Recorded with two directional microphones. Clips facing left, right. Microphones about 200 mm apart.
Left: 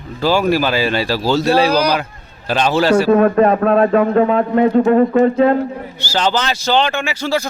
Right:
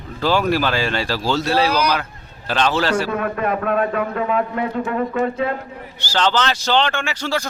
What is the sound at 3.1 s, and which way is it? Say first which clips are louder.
A man's voice: left 10 dB; 35° left (ahead or behind).